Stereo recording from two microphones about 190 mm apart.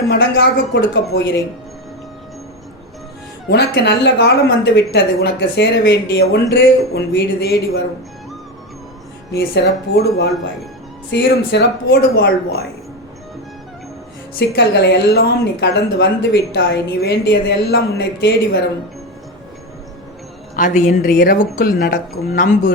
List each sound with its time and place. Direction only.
0.1 s a woman's voice: 65° left (ahead or behind)
3.5 s a woman's voice: 60° left (ahead or behind)
9.3 s a woman's voice: 60° left (ahead or behind)
14.3 s a woman's voice: 65° left (ahead or behind)
20.6 s speech: 40° left (ahead or behind)